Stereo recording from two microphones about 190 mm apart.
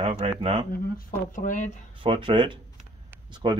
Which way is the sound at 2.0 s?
25° right (ahead or behind).